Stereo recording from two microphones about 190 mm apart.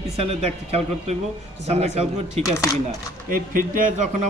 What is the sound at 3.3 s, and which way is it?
Speech, 45° right (ahead or behind).